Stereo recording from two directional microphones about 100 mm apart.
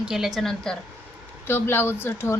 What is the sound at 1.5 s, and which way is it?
Speech, 20° left (ahead or behind).